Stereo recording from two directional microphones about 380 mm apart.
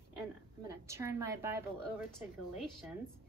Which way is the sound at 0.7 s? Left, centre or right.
Centre.